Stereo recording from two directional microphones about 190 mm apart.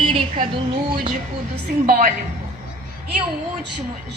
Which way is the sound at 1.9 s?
45° right (ahead or behind).